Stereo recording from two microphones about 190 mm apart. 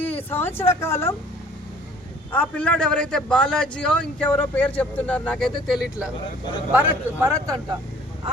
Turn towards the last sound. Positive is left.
turn(degrees=-20)  # may be behind; listen again after turning